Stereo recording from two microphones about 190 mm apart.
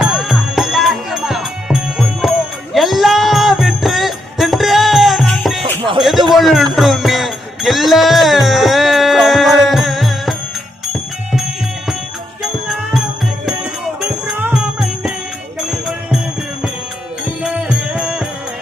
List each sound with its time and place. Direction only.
0.0 s music: centre (ahead or behind)
5.6 s music: 25° right (ahead or behind)
6.0 s a sound: centre (ahead or behind)
6.4 s music: centre (ahead or behind)
12.4 s music: centre (ahead or behind)
14.3 s music: 5° right (ahead or behind)
17.4 s music: 5° right (ahead or behind)